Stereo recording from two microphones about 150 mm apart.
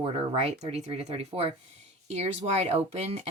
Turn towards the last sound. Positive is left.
turn(degrees=-45)  # may be behind; listen again after turning